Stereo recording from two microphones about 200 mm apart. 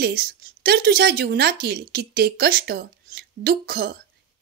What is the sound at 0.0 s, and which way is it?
A woman's voice, 50° right (ahead or behind).